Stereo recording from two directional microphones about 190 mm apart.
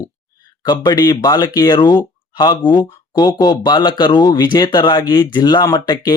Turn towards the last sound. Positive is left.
turn(degrees=20)  # may be behind; listen again after turning